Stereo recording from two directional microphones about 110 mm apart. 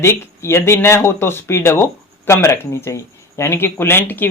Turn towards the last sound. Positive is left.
turn(degrees=20)  # may be behind; listen again after turning